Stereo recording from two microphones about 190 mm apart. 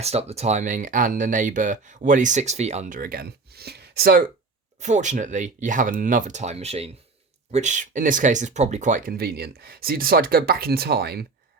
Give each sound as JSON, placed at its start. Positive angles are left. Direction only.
{"t": 0.0, "sound": "speech", "side_deg": -35}
{"t": 4.8, "sound": "speech", "side_deg": -40}